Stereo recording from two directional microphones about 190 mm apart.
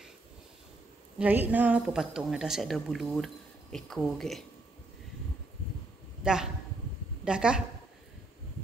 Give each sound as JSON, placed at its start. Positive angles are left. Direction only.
{"t": 1.1, "sound": "a woman's voice", "side_deg": -10}
{"t": 6.2, "sound": "a woman's voice", "side_deg": -5}